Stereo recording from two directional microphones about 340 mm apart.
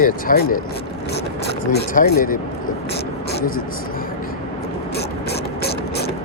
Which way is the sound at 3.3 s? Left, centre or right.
Left.